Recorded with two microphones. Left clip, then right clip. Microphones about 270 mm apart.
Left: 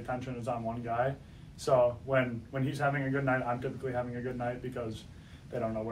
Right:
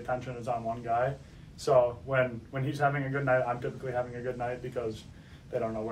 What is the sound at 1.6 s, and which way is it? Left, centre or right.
Speech, centre.